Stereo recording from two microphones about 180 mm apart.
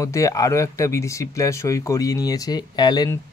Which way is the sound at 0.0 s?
15° left (ahead or behind).